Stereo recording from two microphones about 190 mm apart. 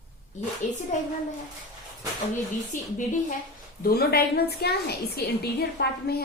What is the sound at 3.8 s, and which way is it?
A woman's voice, 55° left (ahead or behind).